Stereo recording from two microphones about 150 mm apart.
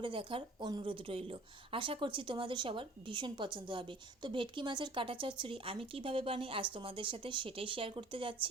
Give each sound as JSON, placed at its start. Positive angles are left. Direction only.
{"t": 0.0, "sound": "speech", "side_deg": -35}